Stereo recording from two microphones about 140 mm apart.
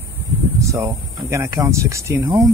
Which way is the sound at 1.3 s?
20° right (ahead or behind).